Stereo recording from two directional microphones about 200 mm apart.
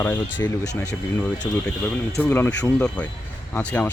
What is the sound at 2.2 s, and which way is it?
Speech, 10° left (ahead or behind).